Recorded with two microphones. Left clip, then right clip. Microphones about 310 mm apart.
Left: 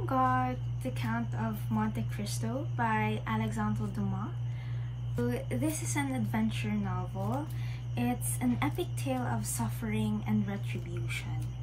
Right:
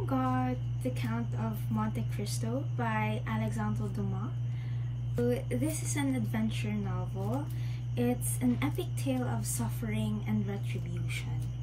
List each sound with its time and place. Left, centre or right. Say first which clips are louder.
0.1 s a sound: left 4 dB; centre
2.8 s speech: left 4 dB; centre
5.1 s speech: right 3 dB; centre
7.9 s speech: right 2 dB; centre